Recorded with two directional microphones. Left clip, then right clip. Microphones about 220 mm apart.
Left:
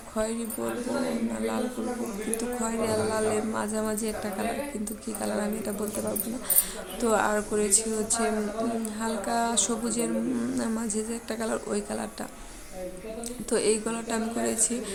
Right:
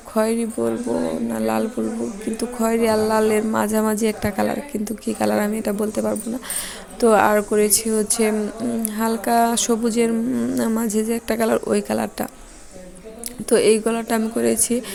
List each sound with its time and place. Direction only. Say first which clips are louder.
0.1 s speech: right 10 dB; 30° right (ahead or behind)
13.5 s speech: right 10 dB; 25° right (ahead or behind)